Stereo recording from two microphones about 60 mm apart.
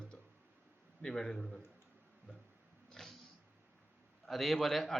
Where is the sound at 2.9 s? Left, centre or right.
Centre.